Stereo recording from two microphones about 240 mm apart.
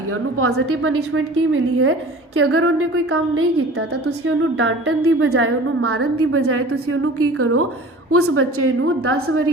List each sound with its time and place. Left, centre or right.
0.3 s a woman's voice: right